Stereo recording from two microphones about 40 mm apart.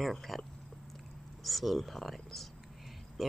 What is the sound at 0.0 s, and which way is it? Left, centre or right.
Speech, centre.